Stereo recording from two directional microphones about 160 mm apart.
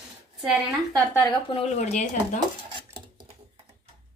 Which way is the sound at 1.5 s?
40° left (ahead or behind).